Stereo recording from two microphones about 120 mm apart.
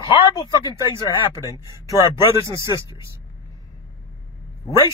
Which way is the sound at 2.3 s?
25° right (ahead or behind).